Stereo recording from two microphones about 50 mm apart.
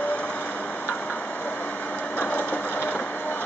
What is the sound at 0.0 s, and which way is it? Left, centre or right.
Vehicle, left.